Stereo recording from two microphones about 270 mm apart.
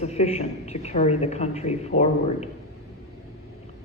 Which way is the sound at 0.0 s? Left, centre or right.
Left.